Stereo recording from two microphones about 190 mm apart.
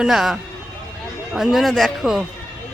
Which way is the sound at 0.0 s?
Centre (ahead or behind).